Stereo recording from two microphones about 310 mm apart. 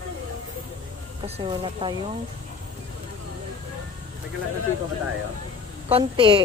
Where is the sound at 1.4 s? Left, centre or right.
Centre.